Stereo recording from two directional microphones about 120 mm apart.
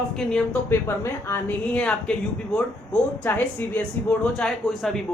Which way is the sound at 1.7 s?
10° left (ahead or behind).